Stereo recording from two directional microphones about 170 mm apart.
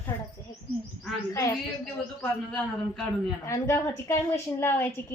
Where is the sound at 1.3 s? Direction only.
20° left (ahead or behind).